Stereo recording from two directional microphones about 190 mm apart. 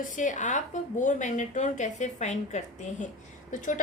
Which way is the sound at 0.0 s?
40° left (ahead or behind).